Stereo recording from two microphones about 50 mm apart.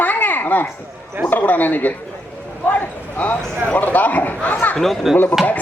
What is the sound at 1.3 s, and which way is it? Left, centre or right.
A man's voice, left.